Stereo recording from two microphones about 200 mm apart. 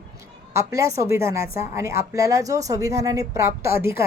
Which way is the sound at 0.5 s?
15° right (ahead or behind).